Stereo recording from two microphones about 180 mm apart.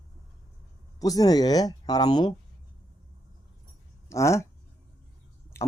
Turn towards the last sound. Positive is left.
turn(degrees=15)  # may be behind; listen again after turning